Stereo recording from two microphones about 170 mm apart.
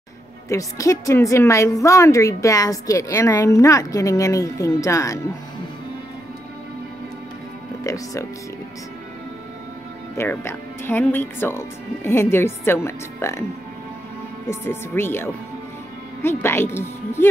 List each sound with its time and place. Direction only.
0.5 s a woman's voice: 20° left (ahead or behind)
7.8 s a woman's voice: 20° left (ahead or behind)
10.1 s speech: 15° left (ahead or behind)
14.5 s speech: 15° left (ahead or behind)